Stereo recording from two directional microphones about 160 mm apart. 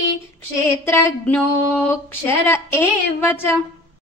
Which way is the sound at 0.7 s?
15° left (ahead or behind).